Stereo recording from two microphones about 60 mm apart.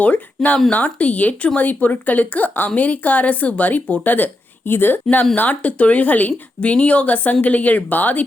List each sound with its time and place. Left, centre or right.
0.0 s speech: left
5.4 s speech: left